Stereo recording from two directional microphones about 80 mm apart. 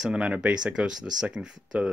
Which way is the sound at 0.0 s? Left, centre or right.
Centre.